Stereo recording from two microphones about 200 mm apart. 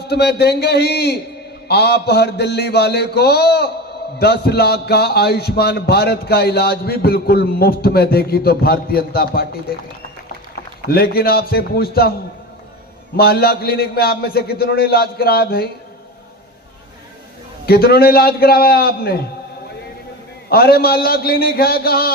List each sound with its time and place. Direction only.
0.0 s a sound: 55° left (ahead or behind)
4.2 s a man's voice: 55° left (ahead or behind)
10.8 s a man's voice: 50° left (ahead or behind)
13.1 s a man's voice: 50° left (ahead or behind)
17.7 s a man's voice: 50° left (ahead or behind)
20.5 s a man's voice: 50° left (ahead or behind)